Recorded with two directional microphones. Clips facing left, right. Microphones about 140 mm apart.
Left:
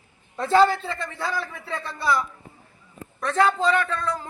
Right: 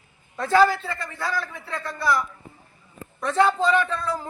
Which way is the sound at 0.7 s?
Centre (ahead or behind).